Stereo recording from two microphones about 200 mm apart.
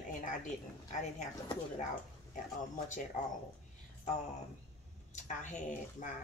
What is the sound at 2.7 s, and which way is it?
Speech, 40° left (ahead or behind).